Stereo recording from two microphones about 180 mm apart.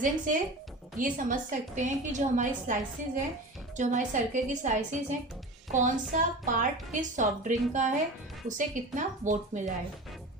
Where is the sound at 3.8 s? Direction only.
45° right (ahead or behind).